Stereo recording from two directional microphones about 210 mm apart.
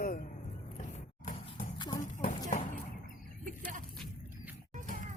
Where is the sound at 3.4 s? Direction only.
40° right (ahead or behind).